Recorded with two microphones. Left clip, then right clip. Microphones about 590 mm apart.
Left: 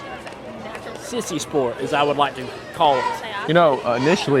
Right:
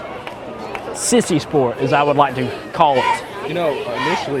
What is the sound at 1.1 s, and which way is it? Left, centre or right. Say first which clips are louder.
A man's voice: right 7 dB; right.